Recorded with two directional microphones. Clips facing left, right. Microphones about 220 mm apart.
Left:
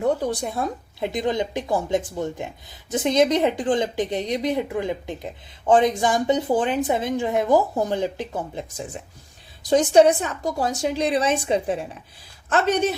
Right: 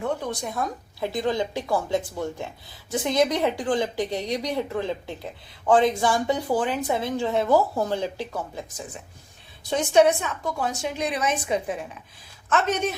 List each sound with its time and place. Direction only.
0.0 s a woman's voice: 35° left (ahead or behind)
9.6 s a woman's voice: 35° left (ahead or behind)